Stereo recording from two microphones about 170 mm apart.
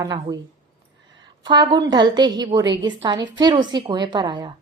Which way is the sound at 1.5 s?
25° right (ahead or behind).